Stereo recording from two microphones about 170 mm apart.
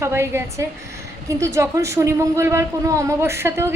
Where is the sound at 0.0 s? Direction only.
15° right (ahead or behind).